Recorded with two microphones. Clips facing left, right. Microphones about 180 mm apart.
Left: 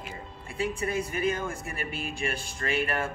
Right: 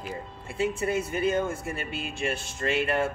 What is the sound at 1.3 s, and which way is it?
Speech, 25° right (ahead or behind).